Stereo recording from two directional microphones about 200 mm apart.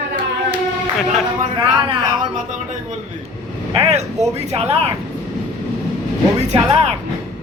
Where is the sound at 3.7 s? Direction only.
30° right (ahead or behind).